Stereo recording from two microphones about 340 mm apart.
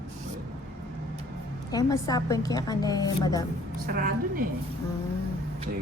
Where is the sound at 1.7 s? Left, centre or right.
Centre.